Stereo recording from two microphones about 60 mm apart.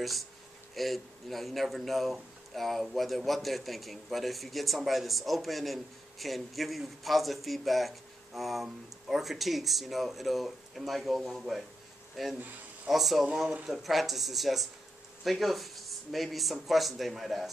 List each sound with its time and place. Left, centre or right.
0.0 s a man's voice: centre